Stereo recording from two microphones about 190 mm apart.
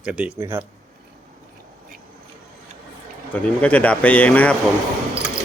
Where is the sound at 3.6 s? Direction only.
5° left (ahead or behind).